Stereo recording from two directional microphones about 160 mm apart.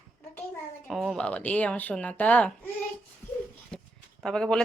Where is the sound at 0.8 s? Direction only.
Centre (ahead or behind).